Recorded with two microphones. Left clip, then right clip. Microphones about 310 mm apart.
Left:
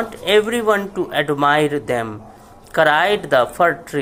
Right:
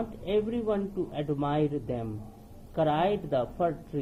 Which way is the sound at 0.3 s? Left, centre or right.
Left.